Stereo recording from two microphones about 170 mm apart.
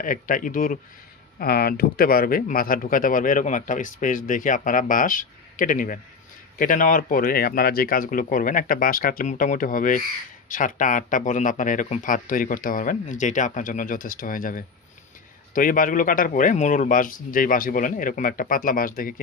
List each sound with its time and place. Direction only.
0.0 s speech: 55° left (ahead or behind)
1.4 s speech: 65° left (ahead or behind)